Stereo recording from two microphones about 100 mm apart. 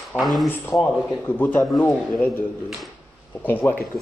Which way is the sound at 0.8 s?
15° left (ahead or behind).